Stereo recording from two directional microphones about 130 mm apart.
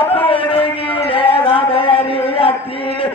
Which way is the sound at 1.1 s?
40° left (ahead or behind).